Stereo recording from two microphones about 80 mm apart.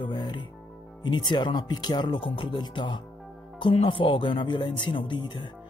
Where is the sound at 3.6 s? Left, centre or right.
Left.